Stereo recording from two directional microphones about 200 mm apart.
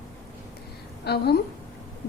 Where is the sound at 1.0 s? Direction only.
55° left (ahead or behind).